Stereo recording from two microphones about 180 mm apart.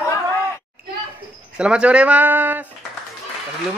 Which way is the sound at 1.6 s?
5° right (ahead or behind).